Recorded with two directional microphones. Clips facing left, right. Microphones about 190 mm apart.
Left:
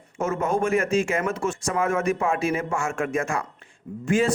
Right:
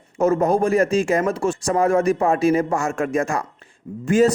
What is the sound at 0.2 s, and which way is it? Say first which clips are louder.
Speech: right 6 dB; 35° right (ahead or behind).